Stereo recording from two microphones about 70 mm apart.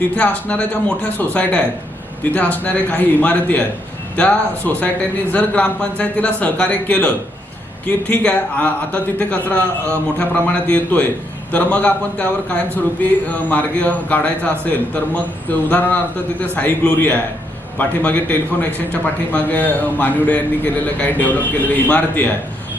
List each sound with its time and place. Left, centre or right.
0.2 s speech: centre